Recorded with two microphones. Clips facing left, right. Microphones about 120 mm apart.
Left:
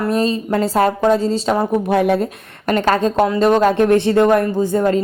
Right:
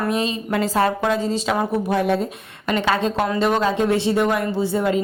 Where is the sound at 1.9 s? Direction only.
60° left (ahead or behind).